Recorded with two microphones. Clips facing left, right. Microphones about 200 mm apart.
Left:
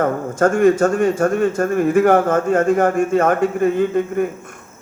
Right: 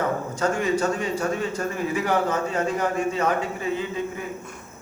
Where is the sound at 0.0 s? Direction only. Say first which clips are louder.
Left 8 dB; 50° left (ahead or behind).